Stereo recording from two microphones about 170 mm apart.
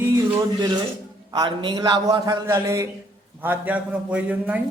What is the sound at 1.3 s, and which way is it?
A man's voice, 25° right (ahead or behind).